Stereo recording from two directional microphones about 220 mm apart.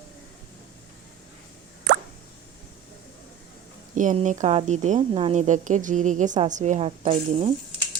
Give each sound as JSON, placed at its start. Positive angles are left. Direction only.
{"t": 3.9, "sound": "a woman's voice", "side_deg": -35}